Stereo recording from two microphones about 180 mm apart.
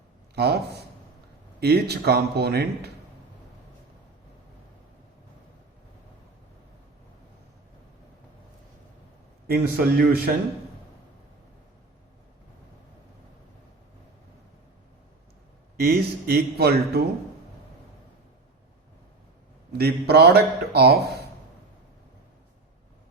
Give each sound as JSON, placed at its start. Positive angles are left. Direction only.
{"t": 0.3, "sound": "speech", "side_deg": -60}
{"t": 9.5, "sound": "speech", "side_deg": -60}
{"t": 15.8, "sound": "speech", "side_deg": -60}
{"t": 19.7, "sound": "speech", "side_deg": -60}